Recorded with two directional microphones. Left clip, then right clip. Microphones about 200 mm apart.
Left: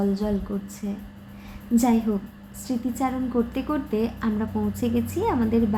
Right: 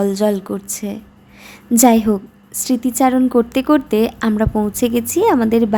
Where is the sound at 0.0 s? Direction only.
50° right (ahead or behind).